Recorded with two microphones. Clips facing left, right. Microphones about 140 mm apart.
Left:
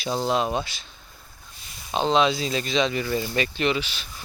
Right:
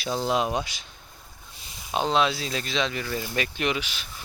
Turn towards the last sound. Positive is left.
turn(degrees=-10)  # may be behind; listen again after turning